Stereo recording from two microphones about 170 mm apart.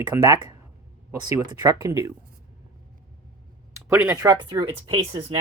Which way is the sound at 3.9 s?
10° right (ahead or behind).